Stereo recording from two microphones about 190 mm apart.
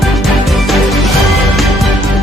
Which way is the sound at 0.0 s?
Centre (ahead or behind).